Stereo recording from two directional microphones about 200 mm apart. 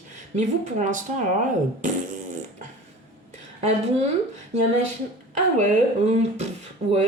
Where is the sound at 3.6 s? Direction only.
35° right (ahead or behind).